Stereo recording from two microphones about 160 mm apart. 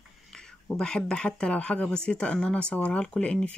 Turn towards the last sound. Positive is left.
turn(degrees=5)  # may be behind; listen again after turning